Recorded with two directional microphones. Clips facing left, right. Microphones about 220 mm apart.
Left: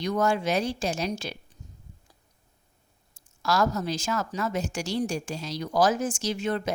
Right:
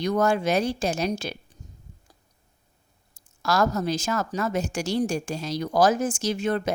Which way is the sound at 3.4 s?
50° right (ahead or behind).